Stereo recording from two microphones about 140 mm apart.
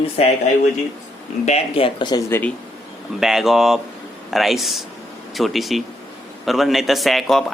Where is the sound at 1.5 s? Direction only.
45° left (ahead or behind).